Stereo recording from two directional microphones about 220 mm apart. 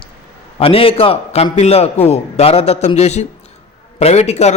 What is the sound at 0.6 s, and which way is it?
A man's voice, 25° left (ahead or behind).